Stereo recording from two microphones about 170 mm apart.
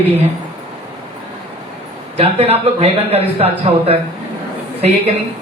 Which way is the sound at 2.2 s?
35° right (ahead or behind).